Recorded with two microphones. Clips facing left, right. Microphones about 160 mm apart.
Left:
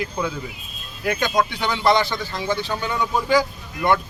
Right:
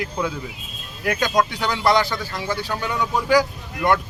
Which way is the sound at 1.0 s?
10° right (ahead or behind).